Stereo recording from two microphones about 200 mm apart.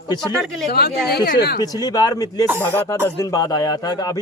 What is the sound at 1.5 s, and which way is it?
A man's voice, 20° left (ahead or behind).